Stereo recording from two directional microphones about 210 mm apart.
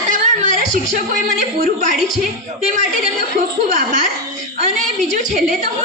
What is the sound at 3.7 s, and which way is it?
Speech, 35° right (ahead or behind).